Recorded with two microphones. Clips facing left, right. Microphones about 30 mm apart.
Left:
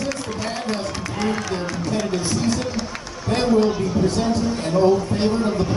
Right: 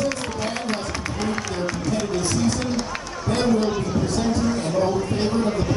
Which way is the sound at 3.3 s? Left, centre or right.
Centre.